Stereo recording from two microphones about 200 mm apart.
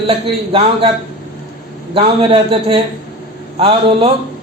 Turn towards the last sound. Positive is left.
turn(degrees=-25)  # may be behind; listen again after turning